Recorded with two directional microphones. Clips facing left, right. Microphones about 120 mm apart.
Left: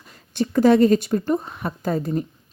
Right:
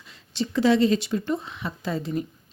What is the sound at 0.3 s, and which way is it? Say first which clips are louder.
A woman's voice: left 5 dB; 50° left (ahead or behind).